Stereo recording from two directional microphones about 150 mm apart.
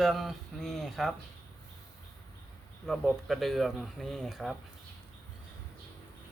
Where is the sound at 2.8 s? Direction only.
Centre (ahead or behind).